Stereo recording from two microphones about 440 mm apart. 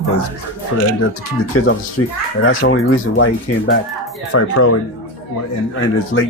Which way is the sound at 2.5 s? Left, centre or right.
Left.